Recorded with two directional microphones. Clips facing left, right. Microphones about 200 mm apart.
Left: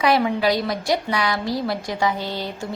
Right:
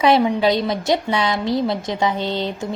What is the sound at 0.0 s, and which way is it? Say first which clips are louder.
A woman's voice: right 3 dB; 20° right (ahead or behind).